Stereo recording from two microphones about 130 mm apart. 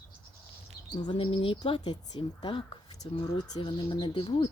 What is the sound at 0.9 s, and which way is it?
Speech, 35° left (ahead or behind).